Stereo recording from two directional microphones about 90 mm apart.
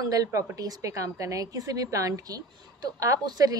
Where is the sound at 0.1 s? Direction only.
40° right (ahead or behind).